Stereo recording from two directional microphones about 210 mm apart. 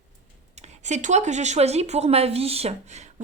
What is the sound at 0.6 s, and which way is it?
Speech, 35° right (ahead or behind).